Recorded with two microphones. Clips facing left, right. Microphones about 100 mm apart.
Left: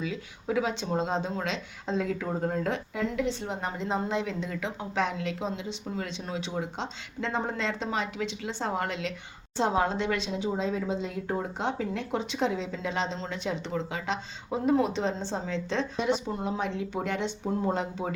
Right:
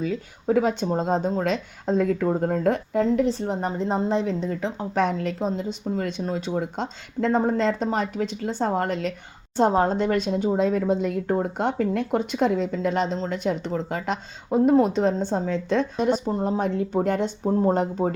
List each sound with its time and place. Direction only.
0.0 s speech: 45° right (ahead or behind)